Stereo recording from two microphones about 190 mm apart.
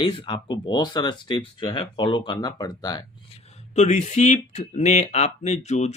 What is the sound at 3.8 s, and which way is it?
Speech, 35° left (ahead or behind).